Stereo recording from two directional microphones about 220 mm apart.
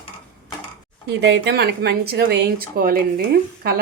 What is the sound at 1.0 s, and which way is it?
Speech, 50° right (ahead or behind).